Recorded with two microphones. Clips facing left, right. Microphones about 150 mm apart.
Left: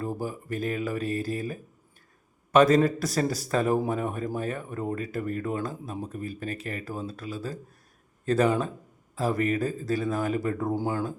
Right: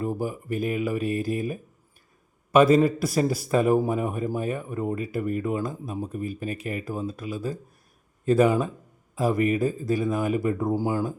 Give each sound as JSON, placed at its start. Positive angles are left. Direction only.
{"t": 0.0, "sound": "a man's voice", "side_deg": -15}